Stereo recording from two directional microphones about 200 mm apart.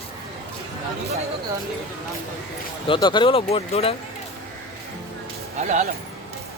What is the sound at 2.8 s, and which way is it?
Speech, 25° left (ahead or behind).